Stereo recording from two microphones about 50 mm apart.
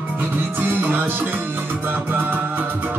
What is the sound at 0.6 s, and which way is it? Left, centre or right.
Music, right.